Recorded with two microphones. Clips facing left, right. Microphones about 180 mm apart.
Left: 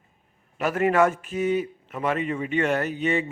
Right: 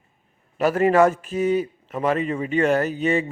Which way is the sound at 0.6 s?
35° right (ahead or behind).